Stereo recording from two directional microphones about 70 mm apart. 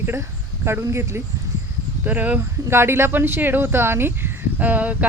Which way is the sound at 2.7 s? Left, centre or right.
Right.